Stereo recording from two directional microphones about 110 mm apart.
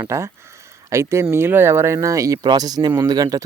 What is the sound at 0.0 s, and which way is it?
Speech, 25° right (ahead or behind).